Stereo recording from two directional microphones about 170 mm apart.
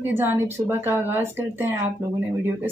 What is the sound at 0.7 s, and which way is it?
A woman's voice, 15° right (ahead or behind).